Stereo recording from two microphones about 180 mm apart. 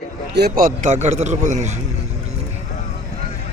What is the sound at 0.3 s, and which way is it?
A man's voice, 60° right (ahead or behind).